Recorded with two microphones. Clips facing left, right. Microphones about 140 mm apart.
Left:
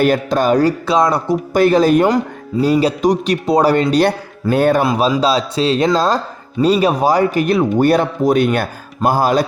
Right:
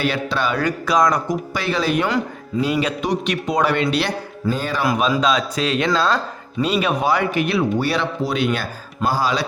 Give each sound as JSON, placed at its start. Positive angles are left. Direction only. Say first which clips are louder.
{"t": 0.0, "sound": "speech", "louder": "left 7 dB", "side_deg": 45}
{"t": 0.9, "sound": "speech", "louder": "left 3 dB", "side_deg": 30}
{"t": 1.5, "sound": "a man's voice", "louder": "left 11 dB", "side_deg": 45}
{"t": 4.4, "sound": "speech", "louder": "left 10 dB", "side_deg": 60}
{"t": 4.8, "sound": "a man's voice", "louder": "left 4 dB", "side_deg": 30}